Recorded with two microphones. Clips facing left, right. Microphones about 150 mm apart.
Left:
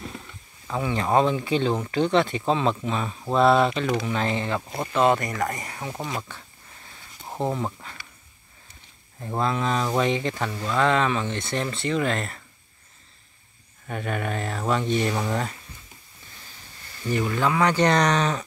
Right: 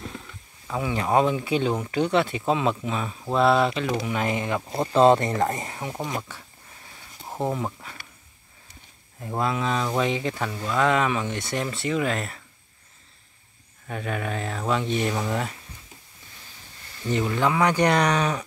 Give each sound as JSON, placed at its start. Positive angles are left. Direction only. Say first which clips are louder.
{"t": 0.7, "sound": "speech", "louder": "even", "side_deg": -10}
{"t": 4.6, "sound": "speech", "louder": "right 4 dB", "side_deg": -30}
{"t": 7.3, "sound": "speech", "louder": "even", "side_deg": -5}
{"t": 9.2, "sound": "speech", "louder": "left 1 dB", "side_deg": -10}
{"t": 13.8, "sound": "speech", "louder": "left 1 dB", "side_deg": 0}
{"t": 17.0, "sound": "speech", "louder": "even", "side_deg": -20}